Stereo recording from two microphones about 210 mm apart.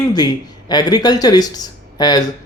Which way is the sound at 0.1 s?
20° left (ahead or behind).